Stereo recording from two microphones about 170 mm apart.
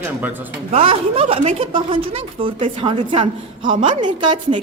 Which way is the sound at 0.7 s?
35° right (ahead or behind).